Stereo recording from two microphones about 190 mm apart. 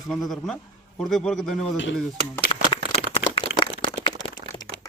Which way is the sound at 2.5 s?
25° left (ahead or behind).